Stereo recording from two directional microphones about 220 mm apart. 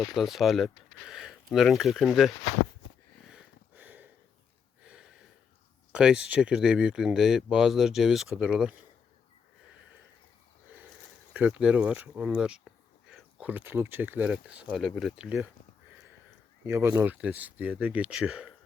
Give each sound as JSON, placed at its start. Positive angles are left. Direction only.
{"t": 0.1, "sound": "speech", "side_deg": 0}
{"t": 3.2, "sound": "a sound", "side_deg": -5}
{"t": 5.9, "sound": "speech", "side_deg": -5}
{"t": 11.3, "sound": "speech", "side_deg": -5}
{"t": 16.6, "sound": "speech", "side_deg": -10}